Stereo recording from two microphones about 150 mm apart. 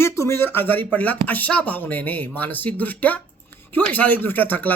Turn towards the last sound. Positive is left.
turn(degrees=10)  # may be behind; listen again after turning